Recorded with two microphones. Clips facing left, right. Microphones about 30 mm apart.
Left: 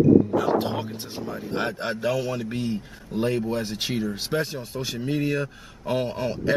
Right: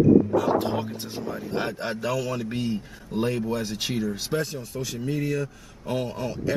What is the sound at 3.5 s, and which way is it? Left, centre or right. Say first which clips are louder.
Speech: left 1 dB; centre.